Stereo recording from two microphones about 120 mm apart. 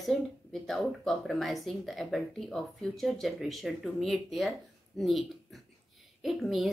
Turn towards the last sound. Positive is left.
turn(degrees=0)  # may be behind; listen again after turning